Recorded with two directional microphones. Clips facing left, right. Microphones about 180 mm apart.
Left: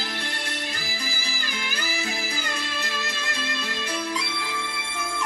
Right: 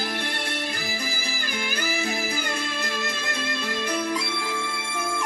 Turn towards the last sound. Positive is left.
turn(degrees=-50)  # may be behind; listen again after turning